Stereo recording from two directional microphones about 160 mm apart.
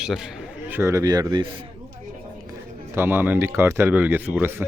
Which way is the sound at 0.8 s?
20° right (ahead or behind).